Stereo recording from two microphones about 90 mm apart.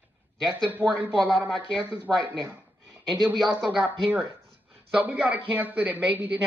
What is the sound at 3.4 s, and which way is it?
Speech, centre (ahead or behind).